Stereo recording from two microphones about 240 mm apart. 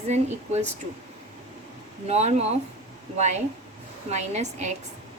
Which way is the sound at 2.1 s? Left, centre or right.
Right.